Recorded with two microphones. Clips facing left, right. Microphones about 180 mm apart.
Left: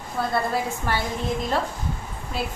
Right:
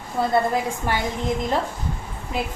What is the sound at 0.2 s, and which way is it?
Speech, 20° right (ahead or behind).